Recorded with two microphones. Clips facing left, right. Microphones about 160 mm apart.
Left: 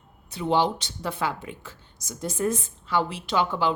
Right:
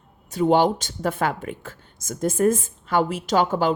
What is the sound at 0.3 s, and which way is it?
Speech, 45° right (ahead or behind).